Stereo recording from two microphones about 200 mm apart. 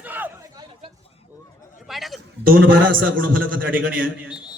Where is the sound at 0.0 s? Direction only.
10° right (ahead or behind).